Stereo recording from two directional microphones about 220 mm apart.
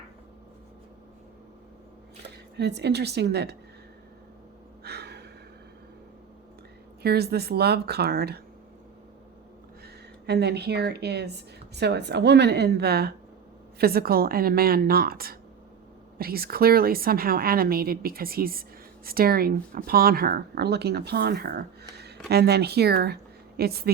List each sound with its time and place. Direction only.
2.6 s a woman's voice: 50° right (ahead or behind)
4.8 s gasp: 45° right (ahead or behind)
7.0 s a woman's voice: 45° right (ahead or behind)
9.8 s a woman's voice: 50° right (ahead or behind)